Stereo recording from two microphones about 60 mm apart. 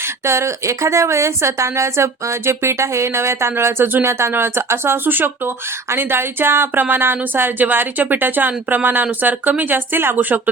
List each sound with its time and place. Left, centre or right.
0.3 s a woman's voice: right